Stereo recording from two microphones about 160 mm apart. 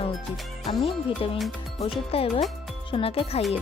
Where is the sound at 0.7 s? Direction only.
35° left (ahead or behind).